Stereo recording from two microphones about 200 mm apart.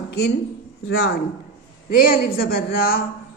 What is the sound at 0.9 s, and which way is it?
Speech, 55° left (ahead or behind).